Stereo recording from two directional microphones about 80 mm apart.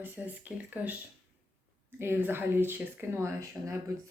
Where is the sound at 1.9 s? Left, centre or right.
Right.